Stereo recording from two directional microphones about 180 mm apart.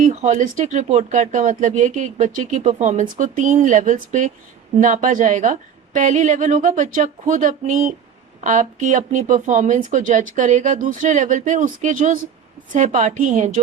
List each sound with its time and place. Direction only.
0.1 s speech: 40° right (ahead or behind)